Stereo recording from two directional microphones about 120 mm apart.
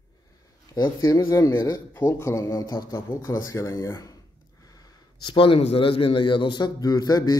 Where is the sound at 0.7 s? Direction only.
30° left (ahead or behind).